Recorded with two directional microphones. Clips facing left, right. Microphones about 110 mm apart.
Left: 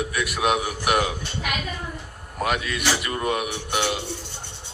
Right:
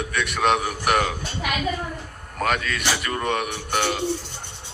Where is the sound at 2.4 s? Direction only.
20° left (ahead or behind).